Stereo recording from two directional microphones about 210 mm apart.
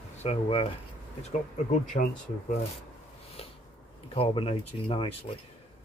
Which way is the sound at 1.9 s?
45° left (ahead or behind).